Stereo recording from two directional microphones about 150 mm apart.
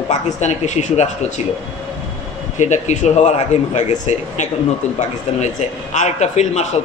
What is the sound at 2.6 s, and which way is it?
A man's voice, 55° left (ahead or behind).